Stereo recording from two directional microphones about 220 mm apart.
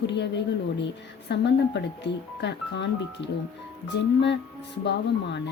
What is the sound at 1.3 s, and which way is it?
A woman's voice, 50° left (ahead or behind).